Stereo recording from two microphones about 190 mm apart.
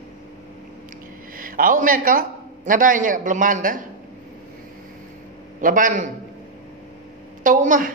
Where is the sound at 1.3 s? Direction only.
45° right (ahead or behind).